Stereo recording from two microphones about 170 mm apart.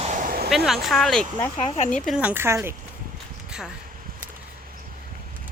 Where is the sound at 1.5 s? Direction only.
45° left (ahead or behind).